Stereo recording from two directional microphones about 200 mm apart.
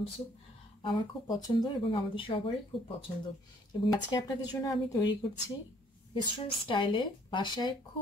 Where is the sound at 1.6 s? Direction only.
30° left (ahead or behind).